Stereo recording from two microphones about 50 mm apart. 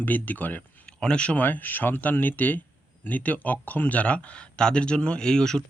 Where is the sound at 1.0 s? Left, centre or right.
Left.